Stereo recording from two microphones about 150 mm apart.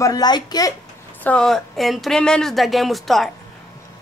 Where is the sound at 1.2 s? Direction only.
5° left (ahead or behind).